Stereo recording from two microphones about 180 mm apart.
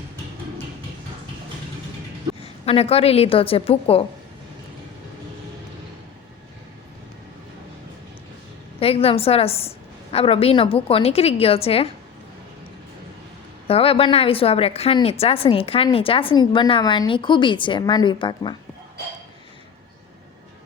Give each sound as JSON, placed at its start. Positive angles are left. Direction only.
{"t": 2.4, "sound": "a woman's voice", "side_deg": 35}
{"t": 8.8, "sound": "a woman's voice", "side_deg": 35}
{"t": 13.7, "sound": "a woman's voice", "side_deg": 30}